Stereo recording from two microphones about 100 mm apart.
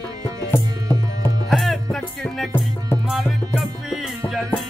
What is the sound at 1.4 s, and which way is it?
Music, centre (ahead or behind).